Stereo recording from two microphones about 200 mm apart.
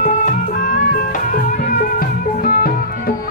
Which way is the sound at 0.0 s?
40° left (ahead or behind).